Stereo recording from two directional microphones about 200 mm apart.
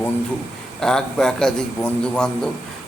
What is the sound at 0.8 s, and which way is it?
A man's voice, 5° left (ahead or behind).